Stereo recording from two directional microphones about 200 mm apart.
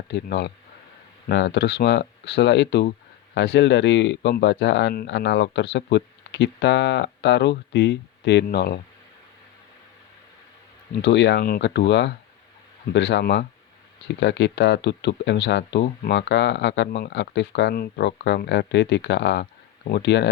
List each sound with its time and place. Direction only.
0.1 s speech: 55° left (ahead or behind)
11.0 s speech: 60° left (ahead or behind)